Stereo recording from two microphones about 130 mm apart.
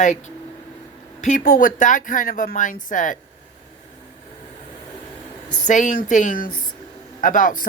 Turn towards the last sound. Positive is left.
turn(degrees=90)